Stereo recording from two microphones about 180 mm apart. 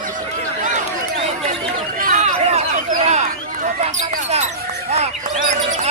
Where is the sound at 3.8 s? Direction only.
40° right (ahead or behind).